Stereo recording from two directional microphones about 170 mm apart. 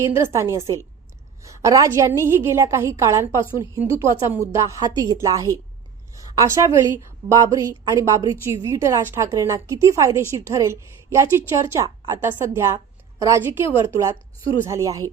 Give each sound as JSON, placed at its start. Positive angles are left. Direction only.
{"t": 0.0, "sound": "a woman's voice", "side_deg": -15}